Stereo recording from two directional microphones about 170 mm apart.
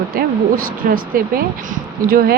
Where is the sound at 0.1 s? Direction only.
60° right (ahead or behind).